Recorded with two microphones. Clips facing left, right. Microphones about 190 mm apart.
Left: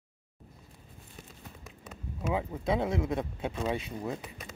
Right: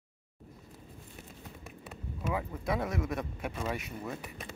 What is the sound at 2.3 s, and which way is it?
Speech, 25° left (ahead or behind).